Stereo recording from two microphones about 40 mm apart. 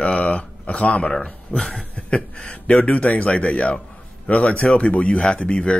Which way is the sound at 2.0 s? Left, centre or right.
Left.